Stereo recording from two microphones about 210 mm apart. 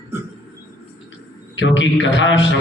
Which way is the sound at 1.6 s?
65° left (ahead or behind).